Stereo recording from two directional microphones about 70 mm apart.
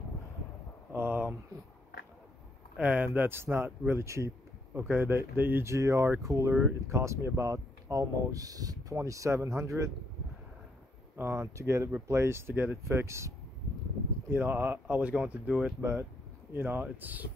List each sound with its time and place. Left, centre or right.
0.9 s a sound: right
2.8 s speech: right
4.0 s speech: right
4.7 s speech: right
5.7 s speech: right
8.9 s speech: right
11.1 s speech: right
11.5 s speech: right
14.3 s speech: right
15.8 s speech: right